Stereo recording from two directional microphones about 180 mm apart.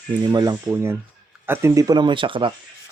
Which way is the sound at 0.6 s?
10° right (ahead or behind).